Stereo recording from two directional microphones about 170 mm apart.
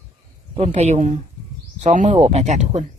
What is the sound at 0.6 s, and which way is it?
Speech, 40° right (ahead or behind).